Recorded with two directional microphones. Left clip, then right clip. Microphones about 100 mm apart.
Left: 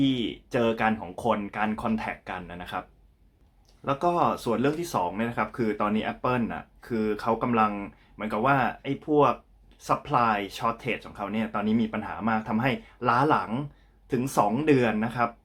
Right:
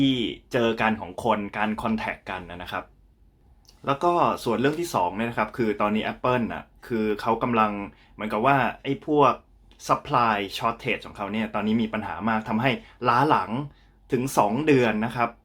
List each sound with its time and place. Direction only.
0.0 s speech: 20° right (ahead or behind)
3.8 s speech: 15° right (ahead or behind)